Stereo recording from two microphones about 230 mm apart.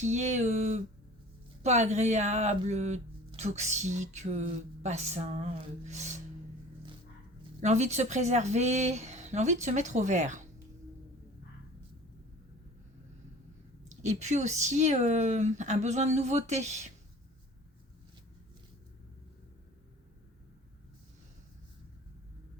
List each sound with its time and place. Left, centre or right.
0.0 s speech: right
7.6 s speech: right
13.8 s speech: right